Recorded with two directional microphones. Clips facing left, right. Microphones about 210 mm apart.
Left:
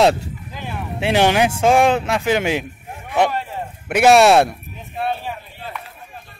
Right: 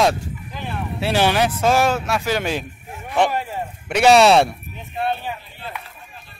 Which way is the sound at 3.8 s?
10° left (ahead or behind).